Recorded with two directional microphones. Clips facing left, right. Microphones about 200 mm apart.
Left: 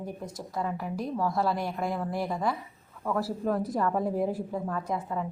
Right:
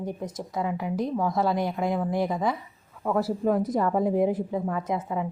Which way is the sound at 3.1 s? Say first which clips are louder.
Right 5 dB; centre (ahead or behind).